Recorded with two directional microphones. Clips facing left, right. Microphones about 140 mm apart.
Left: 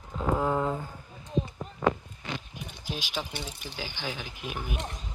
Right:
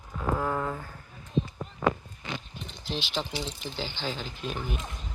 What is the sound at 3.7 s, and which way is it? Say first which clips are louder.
Speech: right 1 dB; 10° left (ahead or behind).